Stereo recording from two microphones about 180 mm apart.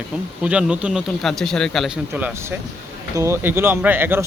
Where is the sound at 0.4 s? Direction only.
5° right (ahead or behind).